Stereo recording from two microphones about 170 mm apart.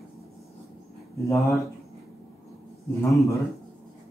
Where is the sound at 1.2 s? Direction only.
15° left (ahead or behind).